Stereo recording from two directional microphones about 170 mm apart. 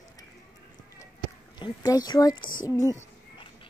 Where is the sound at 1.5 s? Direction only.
25° left (ahead or behind).